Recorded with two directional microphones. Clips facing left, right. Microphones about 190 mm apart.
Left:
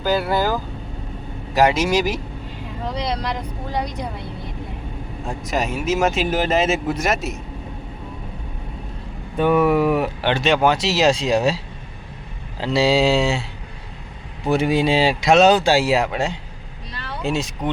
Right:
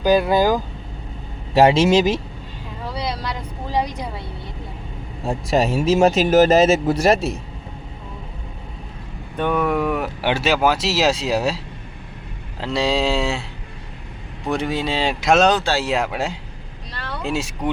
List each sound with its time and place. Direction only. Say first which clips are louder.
0.0 s speech: right 4 dB; 15° right (ahead or behind)
1.5 s speech: right 4 dB; 30° right (ahead or behind)
3.2 s speech: left 2 dB; 10° right (ahead or behind)
5.2 s speech: right 5 dB; 35° right (ahead or behind)
9.4 s speech: left 4 dB; 5° left (ahead or behind)
10.2 s speech: left 1 dB; 10° right (ahead or behind)
14.4 s speech: left 4 dB; 5° left (ahead or behind)
15.2 s speech: left 1 dB; centre (ahead or behind)
16.0 s speech: left 1 dB; centre (ahead or behind)